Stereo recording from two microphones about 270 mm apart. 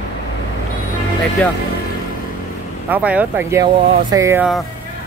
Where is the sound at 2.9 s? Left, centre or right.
Centre.